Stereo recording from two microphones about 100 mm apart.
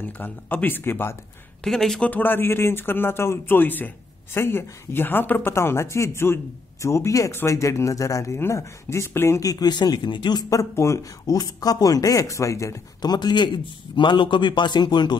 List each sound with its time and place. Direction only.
0.2 s a man's voice: 20° left (ahead or behind)
1.6 s speech: 5° left (ahead or behind)
2.0 s a man's voice: 20° left (ahead or behind)
9.5 s a man's voice: 45° left (ahead or behind)
10.5 s speech: 30° left (ahead or behind)
13.0 s a man's voice: 45° left (ahead or behind)